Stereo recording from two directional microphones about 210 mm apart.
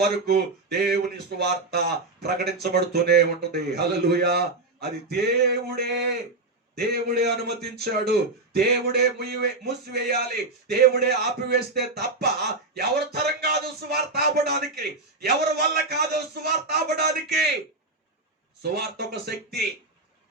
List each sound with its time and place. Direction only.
0.0 s a man's voice: 50° right (ahead or behind)
2.2 s a man's voice: 50° right (ahead or behind)
18.6 s a man's voice: 50° right (ahead or behind)